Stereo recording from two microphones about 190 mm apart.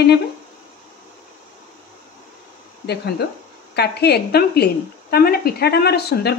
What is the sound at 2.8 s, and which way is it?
A woman's voice, 60° left (ahead or behind).